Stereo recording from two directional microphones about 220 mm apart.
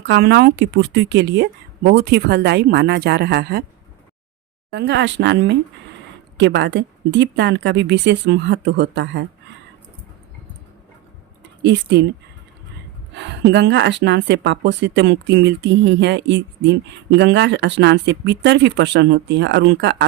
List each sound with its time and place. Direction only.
0.0 s speech: 50° right (ahead or behind)
4.7 s speech: 50° right (ahead or behind)
11.6 s speech: 50° right (ahead or behind)
13.1 s speech: 55° right (ahead or behind)